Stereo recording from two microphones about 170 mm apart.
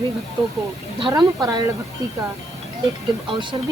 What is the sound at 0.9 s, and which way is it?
Speech, 25° right (ahead or behind).